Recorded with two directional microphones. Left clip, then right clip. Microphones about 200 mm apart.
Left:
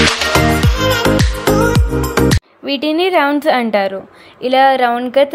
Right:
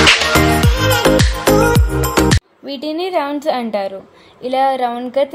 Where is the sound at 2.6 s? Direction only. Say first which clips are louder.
Left 6 dB; 20° left (ahead or behind).